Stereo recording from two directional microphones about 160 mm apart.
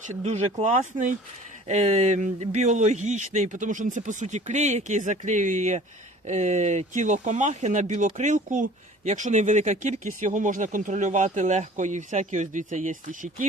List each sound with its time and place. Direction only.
0.1 s speech: 50° right (ahead or behind)